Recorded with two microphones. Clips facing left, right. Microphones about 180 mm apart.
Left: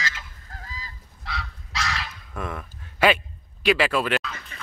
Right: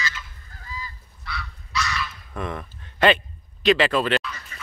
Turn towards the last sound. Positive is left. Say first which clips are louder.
# right 2 dB
turn(degrees=10)  # may be behind; listen again after turning